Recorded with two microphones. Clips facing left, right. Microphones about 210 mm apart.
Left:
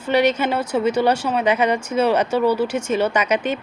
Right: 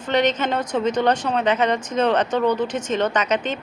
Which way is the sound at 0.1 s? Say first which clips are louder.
Left 2 dB; 10° left (ahead or behind).